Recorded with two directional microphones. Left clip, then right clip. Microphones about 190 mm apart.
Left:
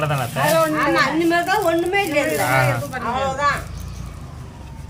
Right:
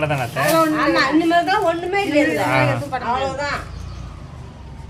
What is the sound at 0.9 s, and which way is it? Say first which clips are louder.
A woman's voice: right 3 dB; 20° right (ahead or behind).